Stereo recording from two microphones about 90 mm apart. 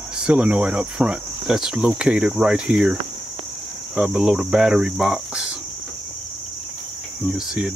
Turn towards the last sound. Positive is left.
turn(degrees=-10)  # may be behind; listen again after turning